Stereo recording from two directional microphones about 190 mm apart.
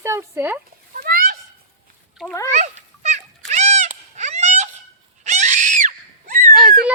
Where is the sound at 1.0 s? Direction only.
50° right (ahead or behind).